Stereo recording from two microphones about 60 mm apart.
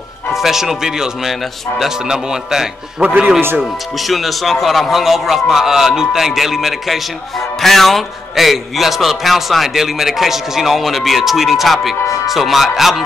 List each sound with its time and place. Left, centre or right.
0.3 s a man's voice: centre
3.0 s speech: right
4.0 s a man's voice: centre